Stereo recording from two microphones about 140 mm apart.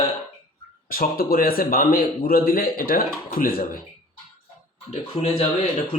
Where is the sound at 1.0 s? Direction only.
90° left.